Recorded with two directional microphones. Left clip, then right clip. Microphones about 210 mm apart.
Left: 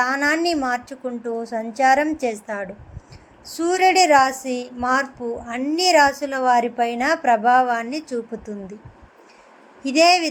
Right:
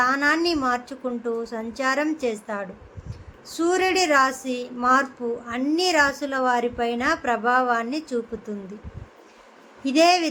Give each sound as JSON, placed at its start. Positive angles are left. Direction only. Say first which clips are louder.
{"t": 0.0, "sound": "a woman's voice", "louder": "left 1 dB", "side_deg": 15}
{"t": 9.8, "sound": "a woman's voice", "louder": "left 3 dB", "side_deg": 15}